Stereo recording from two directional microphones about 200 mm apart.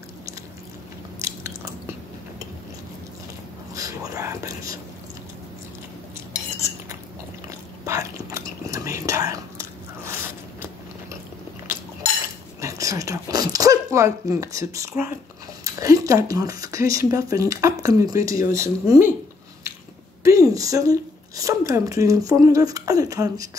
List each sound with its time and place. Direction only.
3.7 s speech: 15° right (ahead or behind)
7.8 s whispering: 15° right (ahead or behind)
12.5 s whispering: 15° right (ahead or behind)
15.6 s speech: 15° right (ahead or behind)
20.2 s a woman's voice: 15° right (ahead or behind)